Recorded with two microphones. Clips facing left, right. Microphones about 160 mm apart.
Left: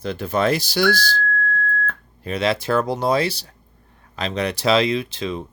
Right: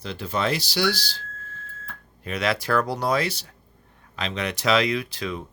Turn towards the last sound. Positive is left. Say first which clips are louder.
# left 4 dB
turn(degrees=25)  # may be behind; listen again after turning